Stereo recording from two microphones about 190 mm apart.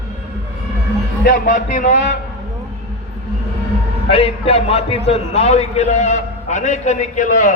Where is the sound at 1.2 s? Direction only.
45° left (ahead or behind).